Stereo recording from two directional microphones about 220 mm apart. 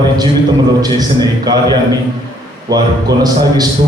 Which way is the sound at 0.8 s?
20° right (ahead or behind).